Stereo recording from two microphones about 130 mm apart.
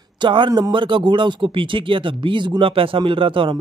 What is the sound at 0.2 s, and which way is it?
Speech, 40° right (ahead or behind).